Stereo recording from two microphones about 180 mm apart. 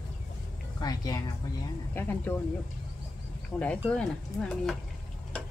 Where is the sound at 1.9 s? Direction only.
10° left (ahead or behind).